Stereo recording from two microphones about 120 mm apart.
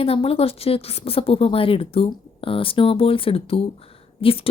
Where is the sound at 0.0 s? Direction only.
50° left (ahead or behind).